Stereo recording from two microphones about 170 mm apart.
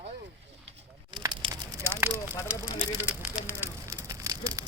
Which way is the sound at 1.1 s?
25° right (ahead or behind).